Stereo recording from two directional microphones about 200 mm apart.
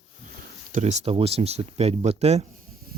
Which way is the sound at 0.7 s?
35° right (ahead or behind).